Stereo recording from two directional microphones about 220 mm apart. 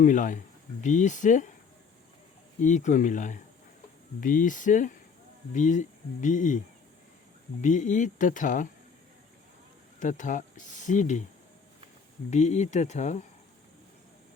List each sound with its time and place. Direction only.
0.0 s speech: 35° left (ahead or behind)
2.6 s speech: 35° left (ahead or behind)
7.6 s speech: 35° left (ahead or behind)
10.0 s speech: 35° left (ahead or behind)
12.3 s speech: 30° left (ahead or behind)